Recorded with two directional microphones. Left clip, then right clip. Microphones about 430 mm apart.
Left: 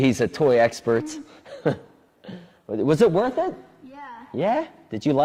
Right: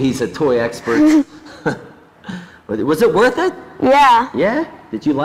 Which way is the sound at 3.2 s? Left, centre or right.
Left.